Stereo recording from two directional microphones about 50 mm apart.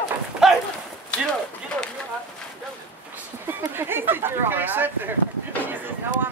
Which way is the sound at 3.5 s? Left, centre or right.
Right.